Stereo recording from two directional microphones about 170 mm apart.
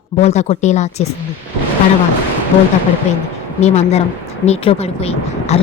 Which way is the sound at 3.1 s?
40° left (ahead or behind).